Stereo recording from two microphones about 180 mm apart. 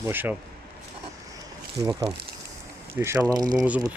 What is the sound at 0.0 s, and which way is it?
Speech, 10° right (ahead or behind).